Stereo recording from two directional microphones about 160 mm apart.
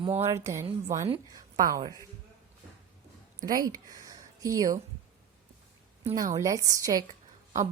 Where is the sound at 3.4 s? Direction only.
25° right (ahead or behind).